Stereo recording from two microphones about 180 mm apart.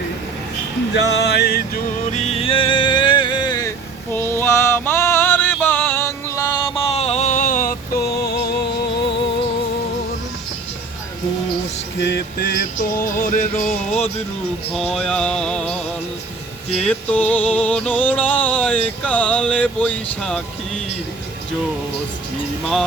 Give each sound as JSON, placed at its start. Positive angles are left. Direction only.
{"t": 0.9, "sound": "music", "side_deg": 70}
{"t": 2.0, "sound": "music", "side_deg": 35}
{"t": 4.1, "sound": "music", "side_deg": 10}
{"t": 7.9, "sound": "music", "side_deg": 60}
{"t": 11.9, "sound": "a sound", "side_deg": 70}
{"t": 13.1, "sound": "music", "side_deg": 50}
{"t": 14.9, "sound": "music", "side_deg": 5}